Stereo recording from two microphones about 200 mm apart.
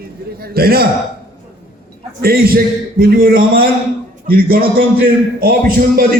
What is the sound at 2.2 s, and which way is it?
A man's voice, 50° right (ahead or behind).